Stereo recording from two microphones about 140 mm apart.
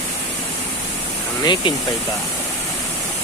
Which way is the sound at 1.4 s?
30° left (ahead or behind).